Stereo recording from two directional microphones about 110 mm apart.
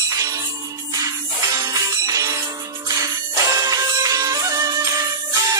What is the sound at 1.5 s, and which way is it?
Music, 35° right (ahead or behind).